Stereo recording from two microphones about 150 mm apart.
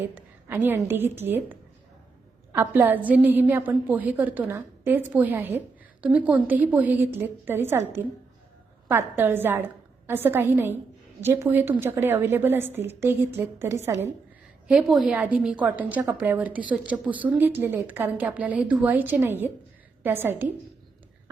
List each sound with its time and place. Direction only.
0.0 s a woman's voice: 15° right (ahead or behind)
14.7 s a woman's voice: 5° right (ahead or behind)